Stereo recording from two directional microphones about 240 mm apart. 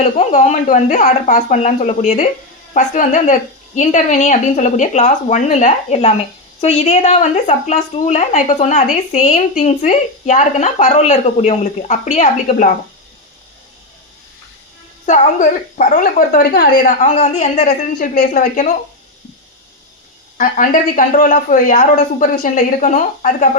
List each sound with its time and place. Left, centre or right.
0.0 s a woman's voice: left
15.0 s a woman's voice: left
20.4 s a woman's voice: left